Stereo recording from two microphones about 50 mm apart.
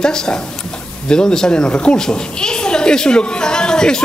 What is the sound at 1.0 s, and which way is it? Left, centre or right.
A woman's voice, centre.